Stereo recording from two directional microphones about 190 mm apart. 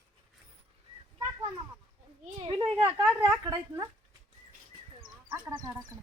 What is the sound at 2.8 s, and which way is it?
A woman's voice, 10° right (ahead or behind).